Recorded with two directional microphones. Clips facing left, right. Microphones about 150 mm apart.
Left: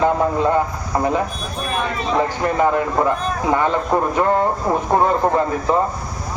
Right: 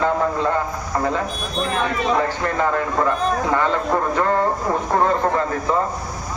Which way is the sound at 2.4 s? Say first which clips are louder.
Left 3 dB; 20° left (ahead or behind).